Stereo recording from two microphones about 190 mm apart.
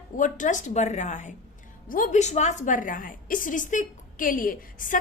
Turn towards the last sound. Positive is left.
turn(degrees=45)  # may be behind; listen again after turning